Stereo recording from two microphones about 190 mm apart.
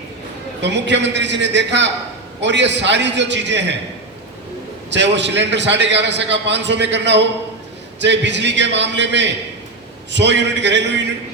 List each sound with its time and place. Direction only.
0.6 s a man's voice: 65° right (ahead or behind)
4.9 s a man's voice: 65° right (ahead or behind)